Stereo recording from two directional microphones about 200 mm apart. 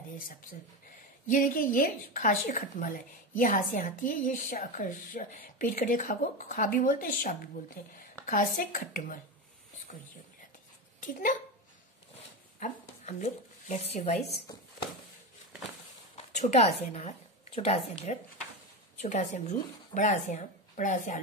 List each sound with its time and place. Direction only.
1.2 s a woman's voice: 45° left (ahead or behind)
11.0 s speech: 40° left (ahead or behind)
12.5 s speech: 35° left (ahead or behind)
16.3 s a woman's voice: 35° left (ahead or behind)